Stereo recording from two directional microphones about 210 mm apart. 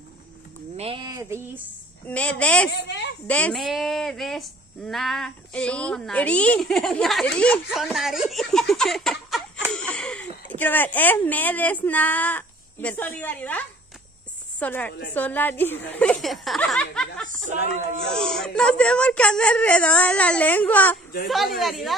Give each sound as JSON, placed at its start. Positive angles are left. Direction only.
{"t": 0.7, "sound": "speech", "side_deg": -25}
{"t": 2.0, "sound": "a woman's voice", "side_deg": 5}
{"t": 2.7, "sound": "speech", "side_deg": 55}
{"t": 3.3, "sound": "a woman's voice", "side_deg": 5}